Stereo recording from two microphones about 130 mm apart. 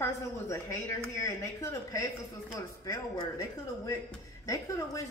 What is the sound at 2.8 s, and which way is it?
Speech, 30° left (ahead or behind).